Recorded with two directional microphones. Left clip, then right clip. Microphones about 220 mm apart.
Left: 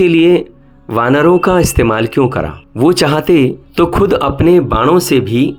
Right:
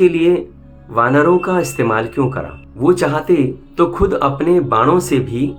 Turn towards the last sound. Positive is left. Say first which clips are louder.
# left 5 dB
turn(degrees=45)  # may be behind; listen again after turning